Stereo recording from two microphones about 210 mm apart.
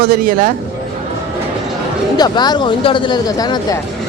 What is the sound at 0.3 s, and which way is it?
Speech, 40° right (ahead or behind).